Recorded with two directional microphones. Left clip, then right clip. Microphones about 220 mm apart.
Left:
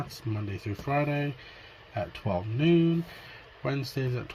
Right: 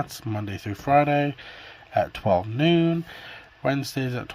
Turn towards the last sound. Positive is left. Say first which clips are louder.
# right 4 dB
turn(degrees=-30)  # may be behind; listen again after turning